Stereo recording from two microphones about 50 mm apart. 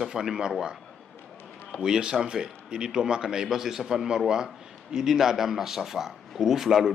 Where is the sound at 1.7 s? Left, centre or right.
Centre.